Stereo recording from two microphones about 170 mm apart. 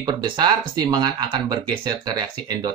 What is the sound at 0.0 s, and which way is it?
Speech, 25° right (ahead or behind).